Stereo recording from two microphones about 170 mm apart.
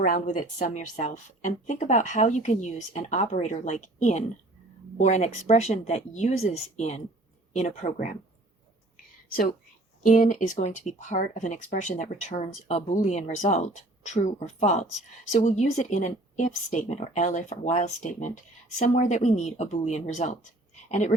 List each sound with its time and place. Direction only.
0.0 s speech: 50° left (ahead or behind)
10.0 s speech: 50° left (ahead or behind)